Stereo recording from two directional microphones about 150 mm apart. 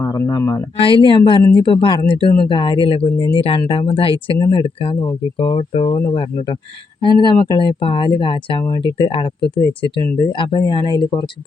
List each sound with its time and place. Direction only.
0.0 s speech: 25° left (ahead or behind)
0.8 s speech: 35° left (ahead or behind)